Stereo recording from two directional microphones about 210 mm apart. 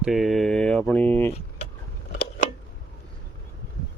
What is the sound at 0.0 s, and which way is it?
Mantra, centre (ahead or behind).